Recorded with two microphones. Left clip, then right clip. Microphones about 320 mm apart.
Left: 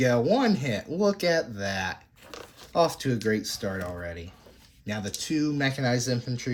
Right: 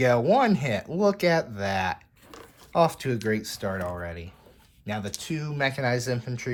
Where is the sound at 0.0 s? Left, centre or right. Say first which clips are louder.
Right 2 dB; centre.